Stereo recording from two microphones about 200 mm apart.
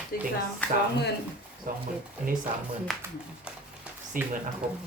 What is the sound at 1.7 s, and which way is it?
Speech, 45° right (ahead or behind).